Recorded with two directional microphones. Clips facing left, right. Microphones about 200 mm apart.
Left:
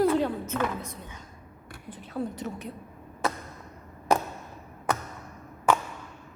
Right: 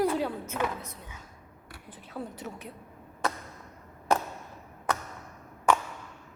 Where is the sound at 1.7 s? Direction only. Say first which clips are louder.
Left 5 dB; 5° right (ahead or behind).